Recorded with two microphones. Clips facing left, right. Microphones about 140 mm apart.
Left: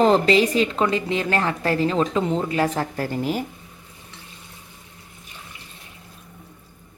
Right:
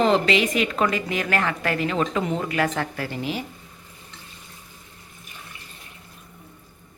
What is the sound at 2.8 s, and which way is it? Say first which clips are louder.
Speech: left 3 dB; 40° left (ahead or behind).